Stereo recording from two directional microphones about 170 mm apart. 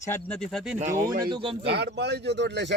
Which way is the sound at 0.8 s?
50° right (ahead or behind).